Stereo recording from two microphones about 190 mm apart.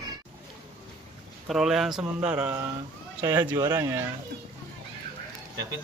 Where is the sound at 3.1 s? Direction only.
20° right (ahead or behind).